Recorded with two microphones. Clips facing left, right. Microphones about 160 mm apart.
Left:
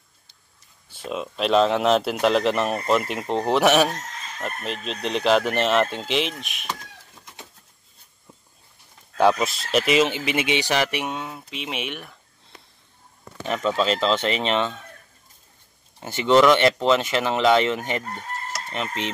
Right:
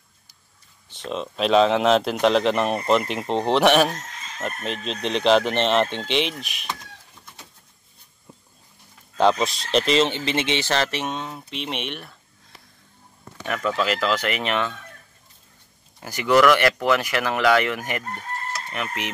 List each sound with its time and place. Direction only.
0.9 s speech: 5° left (ahead or behind)
9.2 s speech: 5° left (ahead or behind)
13.5 s speech: 25° left (ahead or behind)
16.0 s speech: 25° left (ahead or behind)